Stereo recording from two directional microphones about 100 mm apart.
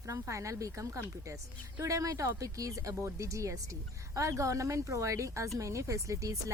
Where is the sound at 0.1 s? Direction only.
30° right (ahead or behind).